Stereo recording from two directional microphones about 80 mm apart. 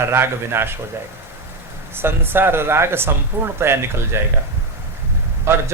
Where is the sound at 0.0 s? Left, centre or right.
Right.